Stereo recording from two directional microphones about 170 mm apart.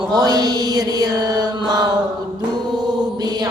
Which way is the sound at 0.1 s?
25° right (ahead or behind).